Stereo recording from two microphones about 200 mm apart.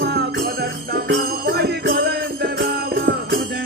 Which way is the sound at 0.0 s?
50° right (ahead or behind).